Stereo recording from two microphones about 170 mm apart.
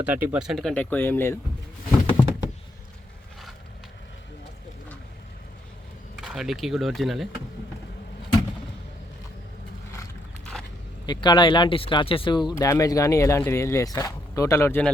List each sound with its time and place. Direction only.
0.0 s speech: 10° right (ahead or behind); by 1.4 s 15° left (ahead or behind)
1.9 s a sound: 20° left (ahead or behind)
6.1 s speech: 5° right (ahead or behind)
11.0 s speech: 25° left (ahead or behind)